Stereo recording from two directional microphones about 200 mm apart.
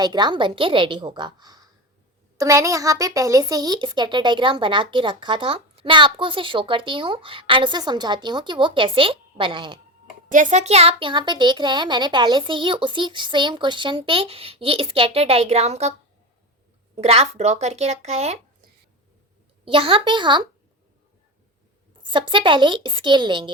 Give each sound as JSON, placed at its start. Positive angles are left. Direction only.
{"t": 0.0, "sound": "speech", "side_deg": -20}
{"t": 10.2, "sound": "speech", "side_deg": -40}
{"t": 16.9, "sound": "speech", "side_deg": -30}
{"t": 19.6, "sound": "speech", "side_deg": -25}
{"t": 22.1, "sound": "speech", "side_deg": -25}